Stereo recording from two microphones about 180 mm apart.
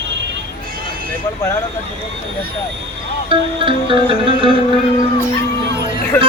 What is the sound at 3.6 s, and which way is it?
Music, 30° right (ahead or behind).